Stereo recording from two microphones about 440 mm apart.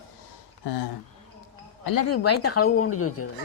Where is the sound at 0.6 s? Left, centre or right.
Left.